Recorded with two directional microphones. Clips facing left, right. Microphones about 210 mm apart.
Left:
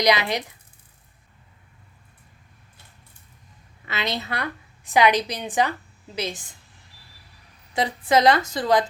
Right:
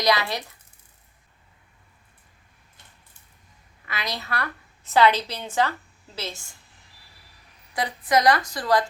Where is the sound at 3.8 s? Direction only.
25° left (ahead or behind).